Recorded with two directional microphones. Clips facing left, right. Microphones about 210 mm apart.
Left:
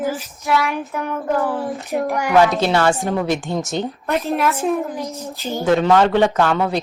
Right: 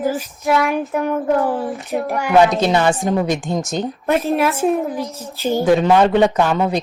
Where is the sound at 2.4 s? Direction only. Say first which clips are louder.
Right 2 dB; 20° right (ahead or behind).